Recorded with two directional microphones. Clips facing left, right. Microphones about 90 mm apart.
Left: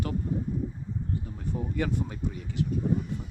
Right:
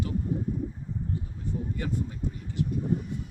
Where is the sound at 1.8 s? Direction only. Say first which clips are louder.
Left 6 dB; 85° left.